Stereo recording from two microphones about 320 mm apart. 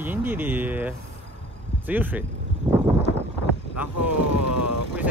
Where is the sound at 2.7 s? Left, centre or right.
Centre.